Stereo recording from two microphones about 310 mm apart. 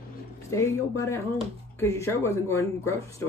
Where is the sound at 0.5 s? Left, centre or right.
Centre.